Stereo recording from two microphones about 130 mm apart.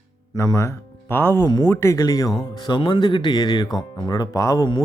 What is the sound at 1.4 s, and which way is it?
Speech, 30° left (ahead or behind).